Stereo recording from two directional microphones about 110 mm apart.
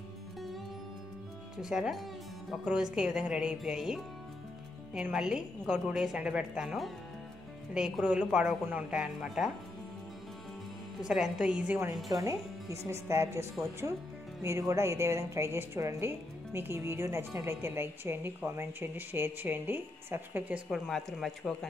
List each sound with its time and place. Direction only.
1.6 s a woman's voice: 5° right (ahead or behind)
11.0 s a woman's voice: 5° right (ahead or behind)
12.1 s a woman's voice: 30° right (ahead or behind)
14.7 s a woman's voice: 25° right (ahead or behind)
20.7 s speech: centre (ahead or behind)